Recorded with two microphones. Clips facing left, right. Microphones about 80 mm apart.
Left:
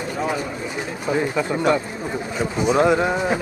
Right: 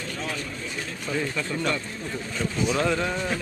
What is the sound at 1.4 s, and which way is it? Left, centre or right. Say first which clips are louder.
Speech: left 8 dB; left.